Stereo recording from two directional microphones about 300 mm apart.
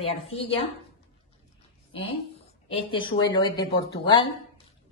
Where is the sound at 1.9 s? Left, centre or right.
Centre.